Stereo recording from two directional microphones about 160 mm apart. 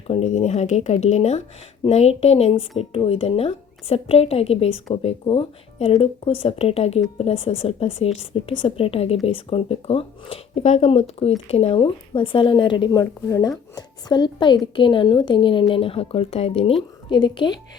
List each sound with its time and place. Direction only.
0.1 s a woman's voice: 40° left (ahead or behind)